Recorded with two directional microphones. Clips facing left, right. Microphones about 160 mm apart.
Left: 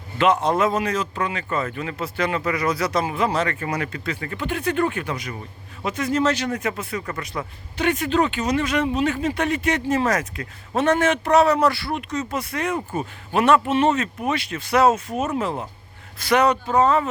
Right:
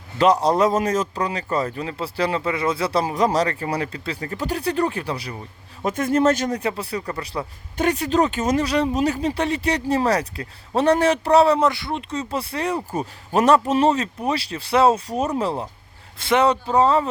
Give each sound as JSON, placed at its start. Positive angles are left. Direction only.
{"t": 0.2, "sound": "speech", "side_deg": -35}
{"t": 5.8, "sound": "speech", "side_deg": -50}
{"t": 6.6, "sound": "speech", "side_deg": -35}
{"t": 7.3, "sound": "speech", "side_deg": -25}
{"t": 7.8, "sound": "speech", "side_deg": -35}
{"t": 11.7, "sound": "speech", "side_deg": -20}
{"t": 12.3, "sound": "speech", "side_deg": -30}